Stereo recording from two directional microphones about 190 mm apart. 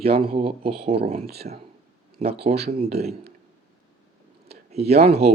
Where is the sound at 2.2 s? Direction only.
30° right (ahead or behind).